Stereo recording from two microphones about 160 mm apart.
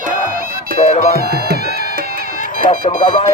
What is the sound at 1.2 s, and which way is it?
Music, 75° right (ahead or behind).